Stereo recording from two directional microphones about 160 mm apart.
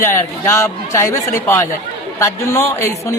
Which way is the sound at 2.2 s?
15° left (ahead or behind).